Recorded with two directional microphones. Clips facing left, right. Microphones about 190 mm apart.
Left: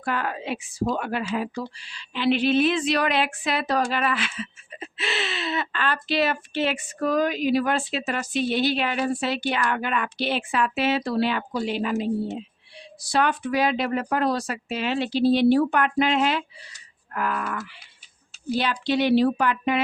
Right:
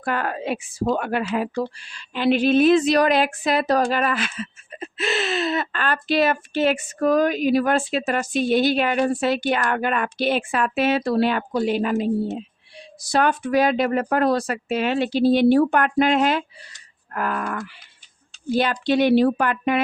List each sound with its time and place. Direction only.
0.0 s speech: 50° right (ahead or behind)